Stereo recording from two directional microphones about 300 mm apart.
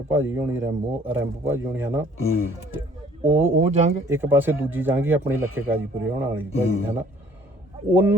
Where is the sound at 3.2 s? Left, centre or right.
Centre.